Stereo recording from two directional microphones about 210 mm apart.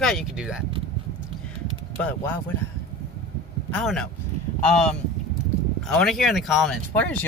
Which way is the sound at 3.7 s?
5° left (ahead or behind).